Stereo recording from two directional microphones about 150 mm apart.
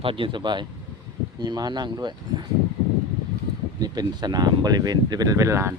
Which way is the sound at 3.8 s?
25° right (ahead or behind).